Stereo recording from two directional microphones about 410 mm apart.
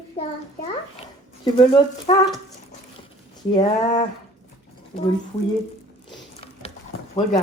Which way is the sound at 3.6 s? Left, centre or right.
Centre.